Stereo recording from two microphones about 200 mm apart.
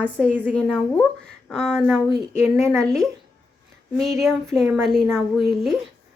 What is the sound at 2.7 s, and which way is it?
Speech, centre (ahead or behind).